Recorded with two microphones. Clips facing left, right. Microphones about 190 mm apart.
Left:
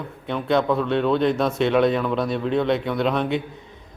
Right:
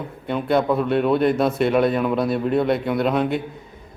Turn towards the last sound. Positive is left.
turn(degrees=-5)  # may be behind; listen again after turning